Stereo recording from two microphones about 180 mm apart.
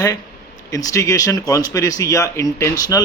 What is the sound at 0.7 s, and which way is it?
A man's voice, 20° left (ahead or behind).